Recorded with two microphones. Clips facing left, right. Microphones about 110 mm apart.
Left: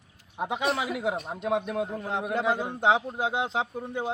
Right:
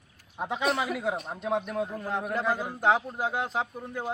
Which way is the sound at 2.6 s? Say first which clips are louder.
Left 1 dB; 25° left (ahead or behind).